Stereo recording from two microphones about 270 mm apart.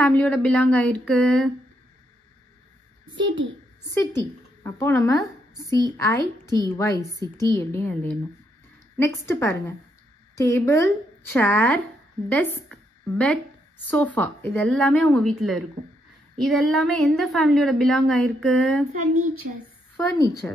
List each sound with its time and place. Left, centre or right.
0.0 s a woman's voice: centre
3.2 s a child's voice: right
3.9 s a woman's voice: centre
20.4 s speech: centre